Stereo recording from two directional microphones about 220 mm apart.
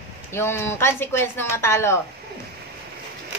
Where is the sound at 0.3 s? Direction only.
10° left (ahead or behind).